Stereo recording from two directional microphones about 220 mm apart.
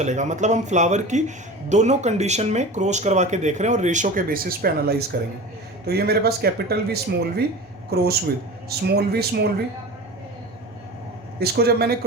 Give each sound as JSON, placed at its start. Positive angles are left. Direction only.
{"t": 0.0, "sound": "speech", "side_deg": -35}
{"t": 11.3, "sound": "speech", "side_deg": -45}